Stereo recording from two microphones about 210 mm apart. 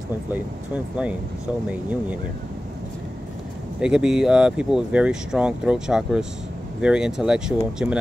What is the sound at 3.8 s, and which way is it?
Speech, 5° right (ahead or behind).